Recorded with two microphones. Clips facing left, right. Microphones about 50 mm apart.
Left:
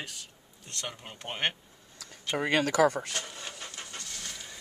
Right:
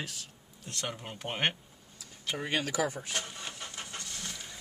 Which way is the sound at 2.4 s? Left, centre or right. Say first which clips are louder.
Left 7 dB; left.